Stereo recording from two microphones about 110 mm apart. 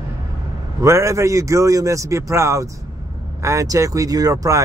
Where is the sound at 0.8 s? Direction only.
25° right (ahead or behind).